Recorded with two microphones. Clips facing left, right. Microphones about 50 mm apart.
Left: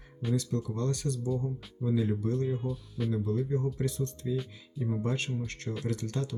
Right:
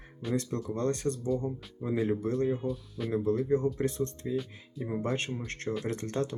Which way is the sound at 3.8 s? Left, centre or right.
Right.